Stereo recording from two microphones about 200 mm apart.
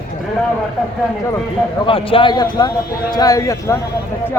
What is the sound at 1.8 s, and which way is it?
A man's voice, 25° left (ahead or behind).